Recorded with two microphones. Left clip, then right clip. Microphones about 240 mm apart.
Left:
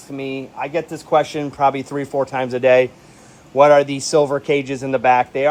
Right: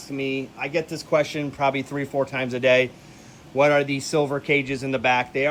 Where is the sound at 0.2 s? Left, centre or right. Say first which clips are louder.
Left 2 dB; centre.